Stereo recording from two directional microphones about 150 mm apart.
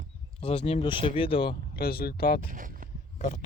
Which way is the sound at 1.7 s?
90° left.